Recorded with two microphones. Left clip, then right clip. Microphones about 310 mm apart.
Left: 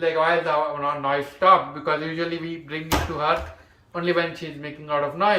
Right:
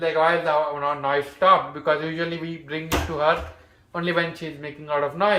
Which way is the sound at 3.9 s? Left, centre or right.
Centre.